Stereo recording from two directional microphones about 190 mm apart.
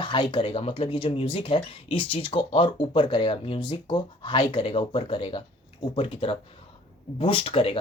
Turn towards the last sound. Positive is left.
turn(degrees=30)  # may be behind; listen again after turning